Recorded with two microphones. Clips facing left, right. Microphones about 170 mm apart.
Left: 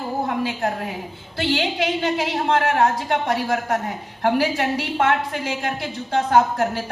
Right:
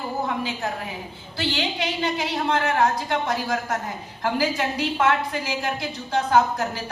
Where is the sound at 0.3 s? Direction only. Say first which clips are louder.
Left 4 dB; 55° left (ahead or behind).